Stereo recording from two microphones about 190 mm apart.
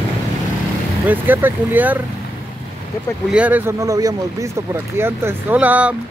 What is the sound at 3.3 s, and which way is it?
Speech, 10° right (ahead or behind).